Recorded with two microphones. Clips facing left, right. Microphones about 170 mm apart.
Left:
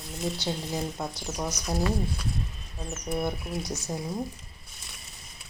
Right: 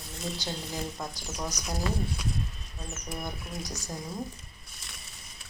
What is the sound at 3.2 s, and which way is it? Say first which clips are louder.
Speech: left 7 dB; 25° left (ahead or behind).